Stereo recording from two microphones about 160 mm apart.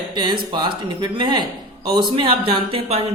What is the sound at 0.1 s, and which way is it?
Speech, 30° right (ahead or behind).